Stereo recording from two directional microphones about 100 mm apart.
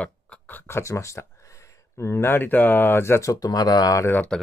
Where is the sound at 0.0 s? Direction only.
15° left (ahead or behind); by 4.0 s 40° left (ahead or behind).